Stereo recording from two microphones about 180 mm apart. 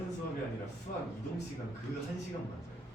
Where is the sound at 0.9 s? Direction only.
50° left (ahead or behind).